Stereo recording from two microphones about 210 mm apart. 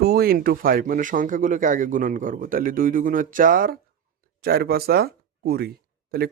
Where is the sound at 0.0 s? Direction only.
50° right (ahead or behind).